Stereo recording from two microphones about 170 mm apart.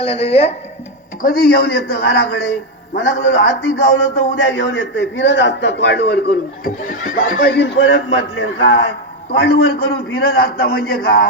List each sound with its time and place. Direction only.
0.0 s a woman's voice: 35° left (ahead or behind)
1.2 s speech: 60° left (ahead or behind); by 2.5 s 75° left (ahead or behind)
2.9 s a man's voice: 90° left
6.8 s a man's voice: 50° left (ahead or behind); by 8.8 s 90° left
9.3 s a man's voice: 75° left (ahead or behind)